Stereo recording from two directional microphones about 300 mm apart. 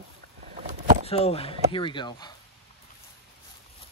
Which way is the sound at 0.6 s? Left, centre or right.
Right.